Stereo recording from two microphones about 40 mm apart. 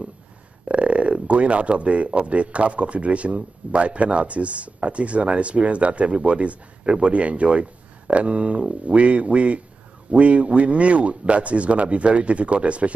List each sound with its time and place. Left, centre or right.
0.7 s speech: right